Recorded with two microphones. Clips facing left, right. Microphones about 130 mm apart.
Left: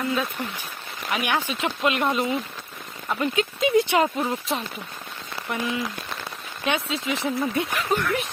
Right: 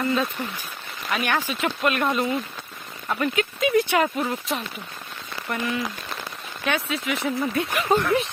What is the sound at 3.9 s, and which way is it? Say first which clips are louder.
Speech: left 1 dB; 25° left (ahead or behind).